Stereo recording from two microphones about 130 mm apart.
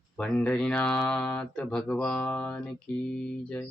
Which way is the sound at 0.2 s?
10° left (ahead or behind).